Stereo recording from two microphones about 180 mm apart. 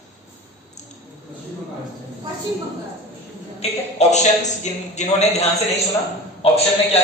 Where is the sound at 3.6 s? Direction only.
40° left (ahead or behind).